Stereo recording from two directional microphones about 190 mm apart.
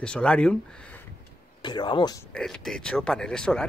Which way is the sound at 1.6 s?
25° left (ahead or behind).